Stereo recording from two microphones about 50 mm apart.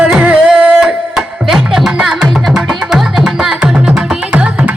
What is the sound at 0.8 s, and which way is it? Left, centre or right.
Music, centre.